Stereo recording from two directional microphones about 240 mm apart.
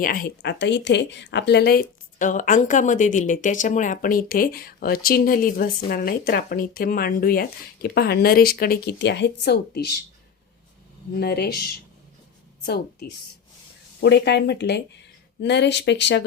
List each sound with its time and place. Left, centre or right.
0.0 s a woman's voice: left
11.2 s a woman's voice: left